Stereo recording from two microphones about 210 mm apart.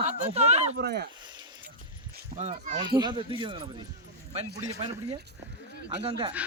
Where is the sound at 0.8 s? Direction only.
50° right (ahead or behind).